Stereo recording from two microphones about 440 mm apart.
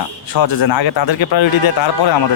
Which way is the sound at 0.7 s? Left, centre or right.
Left.